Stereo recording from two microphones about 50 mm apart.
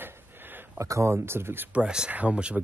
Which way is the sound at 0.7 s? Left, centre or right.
Right.